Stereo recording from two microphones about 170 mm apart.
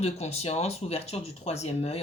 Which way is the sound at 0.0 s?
40° left (ahead or behind).